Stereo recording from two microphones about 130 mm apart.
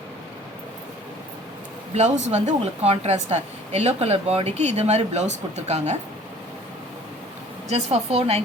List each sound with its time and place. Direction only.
1.9 s speech: 60° right (ahead or behind)
7.7 s speech: 55° right (ahead or behind)